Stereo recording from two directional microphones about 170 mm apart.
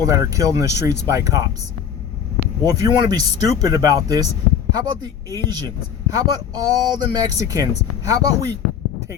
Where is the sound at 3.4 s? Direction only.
20° right (ahead or behind).